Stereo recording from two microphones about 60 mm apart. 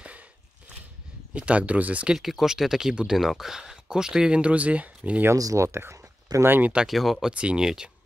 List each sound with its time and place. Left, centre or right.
1.3 s speech: right
2.1 s speech: centre; by 5.2 s right
5.3 s speech: right
6.4 s speech: right
6.9 s speech: centre
7.3 s speech: centre